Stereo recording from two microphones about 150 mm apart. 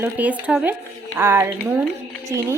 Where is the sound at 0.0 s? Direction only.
10° right (ahead or behind).